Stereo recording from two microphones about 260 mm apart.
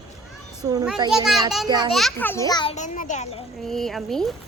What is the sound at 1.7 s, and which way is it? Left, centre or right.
Speech, centre.